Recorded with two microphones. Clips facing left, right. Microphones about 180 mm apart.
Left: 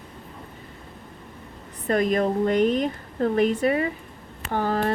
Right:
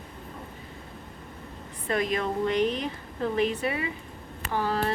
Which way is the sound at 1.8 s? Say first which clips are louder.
Left 6 dB; 45° left (ahead or behind).